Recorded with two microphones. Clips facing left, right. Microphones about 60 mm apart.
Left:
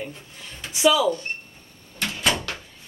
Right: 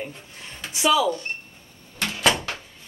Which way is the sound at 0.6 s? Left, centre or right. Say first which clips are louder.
Left 2 dB; centre.